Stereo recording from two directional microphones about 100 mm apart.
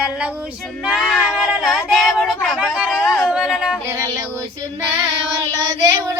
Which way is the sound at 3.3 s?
5° right (ahead or behind).